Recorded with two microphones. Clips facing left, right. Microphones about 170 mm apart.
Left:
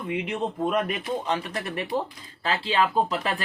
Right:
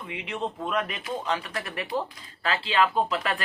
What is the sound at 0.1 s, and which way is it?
Speech, 45° left (ahead or behind).